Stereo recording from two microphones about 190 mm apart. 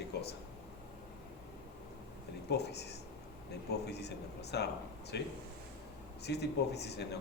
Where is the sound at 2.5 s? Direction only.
60° left (ahead or behind).